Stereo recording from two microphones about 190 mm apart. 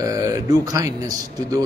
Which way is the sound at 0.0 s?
15° right (ahead or behind).